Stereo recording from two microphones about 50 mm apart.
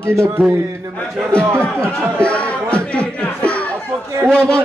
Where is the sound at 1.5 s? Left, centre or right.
Centre.